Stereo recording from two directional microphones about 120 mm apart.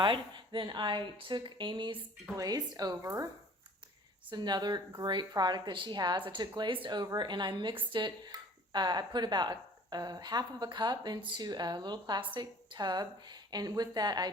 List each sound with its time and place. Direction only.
0.0 s speech: 40° right (ahead or behind)
2.3 s speech: 30° right (ahead or behind)
4.3 s speech: 35° right (ahead or behind)